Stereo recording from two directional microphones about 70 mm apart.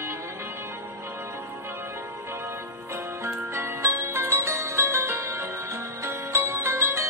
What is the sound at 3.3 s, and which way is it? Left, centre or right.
Music, right.